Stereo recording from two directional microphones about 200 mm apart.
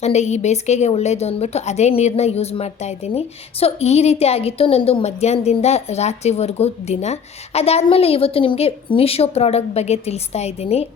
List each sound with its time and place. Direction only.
0.0 s a woman's voice: 35° left (ahead or behind)